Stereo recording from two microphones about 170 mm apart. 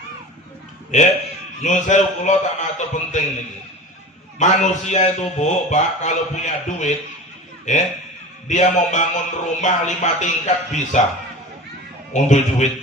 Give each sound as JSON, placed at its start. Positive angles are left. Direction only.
{"t": 0.9, "sound": "speech", "side_deg": 45}
{"t": 4.4, "sound": "speech", "side_deg": 45}
{"t": 12.1, "sound": "speech", "side_deg": 45}